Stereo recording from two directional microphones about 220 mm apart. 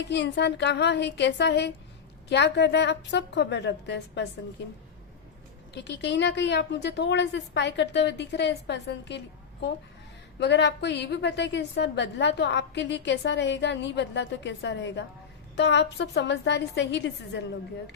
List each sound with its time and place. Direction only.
0.0 s a woman's voice: 50° left (ahead or behind)
5.7 s a woman's voice: 50° left (ahead or behind)